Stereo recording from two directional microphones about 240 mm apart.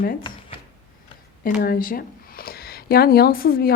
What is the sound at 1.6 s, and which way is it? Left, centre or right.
Speech, left.